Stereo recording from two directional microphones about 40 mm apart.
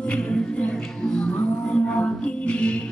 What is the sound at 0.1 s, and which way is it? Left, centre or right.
Music, left.